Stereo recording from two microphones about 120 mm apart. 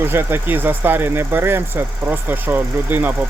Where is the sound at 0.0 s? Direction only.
20° right (ahead or behind).